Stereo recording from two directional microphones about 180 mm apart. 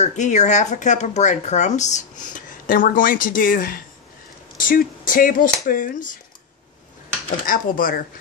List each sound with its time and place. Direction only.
0.0 s speech: 40° left (ahead or behind)
7.4 s speech: 50° left (ahead or behind)